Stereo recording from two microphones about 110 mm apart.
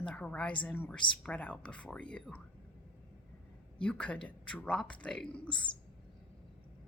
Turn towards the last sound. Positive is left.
turn(degrees=10)  # may be behind; listen again after turning